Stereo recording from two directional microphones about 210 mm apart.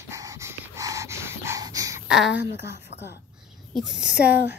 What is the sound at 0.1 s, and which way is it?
Dog, 15° right (ahead or behind).